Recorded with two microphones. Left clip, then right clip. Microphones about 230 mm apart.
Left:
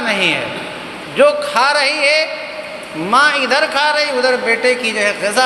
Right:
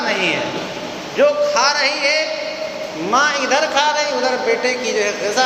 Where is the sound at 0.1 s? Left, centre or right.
Left.